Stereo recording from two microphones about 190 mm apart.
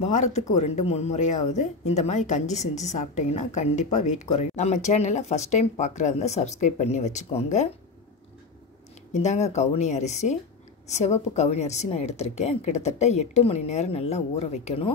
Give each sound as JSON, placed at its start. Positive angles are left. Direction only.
{"t": 0.0, "sound": "speech", "side_deg": 35}
{"t": 9.1, "sound": "speech", "side_deg": 35}